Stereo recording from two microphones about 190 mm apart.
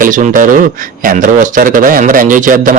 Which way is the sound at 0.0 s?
45° right (ahead or behind).